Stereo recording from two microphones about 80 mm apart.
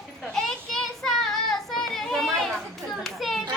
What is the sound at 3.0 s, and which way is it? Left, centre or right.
Children playing, centre.